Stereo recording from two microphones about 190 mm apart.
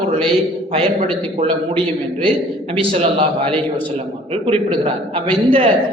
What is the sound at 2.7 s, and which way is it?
Speech, 30° right (ahead or behind).